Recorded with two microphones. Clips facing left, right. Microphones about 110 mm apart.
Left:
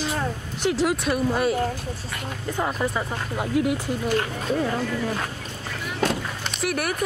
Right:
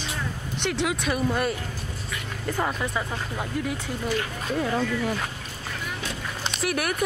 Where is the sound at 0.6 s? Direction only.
5° left (ahead or behind).